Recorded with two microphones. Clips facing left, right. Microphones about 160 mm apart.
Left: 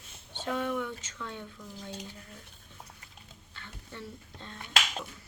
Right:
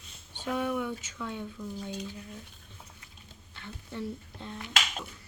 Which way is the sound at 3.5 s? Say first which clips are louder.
Right 6 dB; 15° right (ahead or behind).